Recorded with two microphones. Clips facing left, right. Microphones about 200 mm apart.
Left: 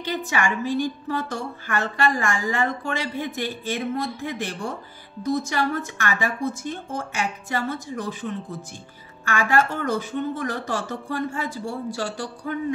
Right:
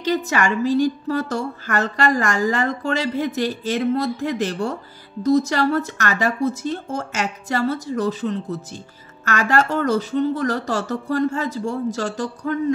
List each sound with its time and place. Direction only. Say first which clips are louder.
0.0 s a woman's voice: right 5 dB; 40° right (ahead or behind)